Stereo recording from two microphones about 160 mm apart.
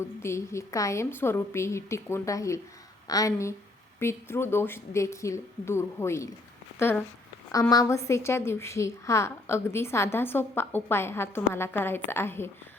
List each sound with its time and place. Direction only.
0.0 s a woman's voice: 15° left (ahead or behind)